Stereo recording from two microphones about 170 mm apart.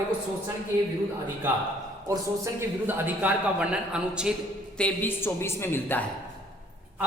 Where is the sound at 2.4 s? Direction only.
15° right (ahead or behind).